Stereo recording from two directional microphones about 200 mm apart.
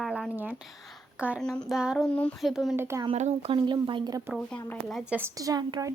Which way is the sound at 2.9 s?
15° right (ahead or behind).